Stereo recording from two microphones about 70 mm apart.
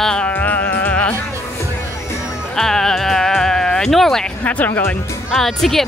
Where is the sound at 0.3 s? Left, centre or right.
Left.